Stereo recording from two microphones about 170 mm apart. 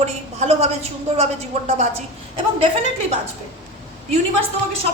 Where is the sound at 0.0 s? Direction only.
40° right (ahead or behind).